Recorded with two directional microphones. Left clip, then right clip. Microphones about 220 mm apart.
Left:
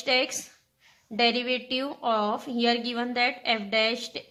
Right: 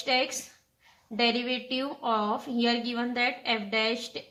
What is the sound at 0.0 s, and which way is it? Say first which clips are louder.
A woman's voice: left 2 dB; 45° left (ahead or behind).